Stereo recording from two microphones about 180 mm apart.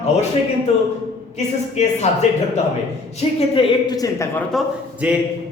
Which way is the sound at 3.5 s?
25° left (ahead or behind).